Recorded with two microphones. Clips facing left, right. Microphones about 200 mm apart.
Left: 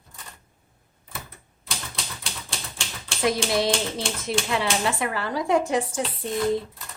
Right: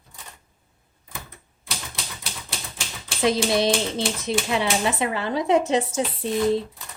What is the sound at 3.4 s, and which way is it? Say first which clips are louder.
Speech: right 2 dB; 20° right (ahead or behind).